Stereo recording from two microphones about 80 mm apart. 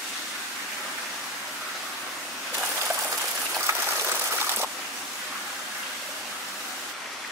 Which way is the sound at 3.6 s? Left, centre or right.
Right.